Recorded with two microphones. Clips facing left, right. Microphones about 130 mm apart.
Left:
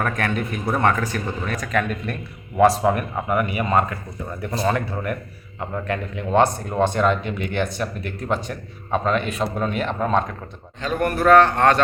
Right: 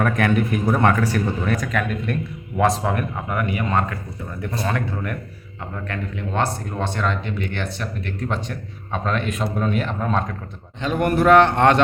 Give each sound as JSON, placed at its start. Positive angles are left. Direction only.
{"t": 0.0, "sound": "speech", "side_deg": -10}
{"t": 10.8, "sound": "speech", "side_deg": -20}